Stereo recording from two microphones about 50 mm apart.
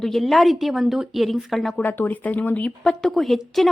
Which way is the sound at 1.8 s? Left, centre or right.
Left.